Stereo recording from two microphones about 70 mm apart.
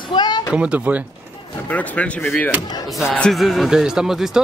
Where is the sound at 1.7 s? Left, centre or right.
Left.